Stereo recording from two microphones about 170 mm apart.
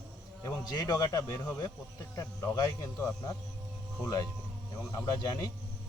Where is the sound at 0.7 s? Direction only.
25° left (ahead or behind).